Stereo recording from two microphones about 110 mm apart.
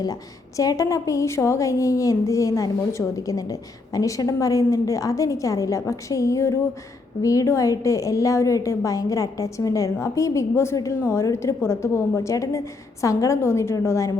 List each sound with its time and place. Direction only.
0.0 s a woman's voice: 35° left (ahead or behind)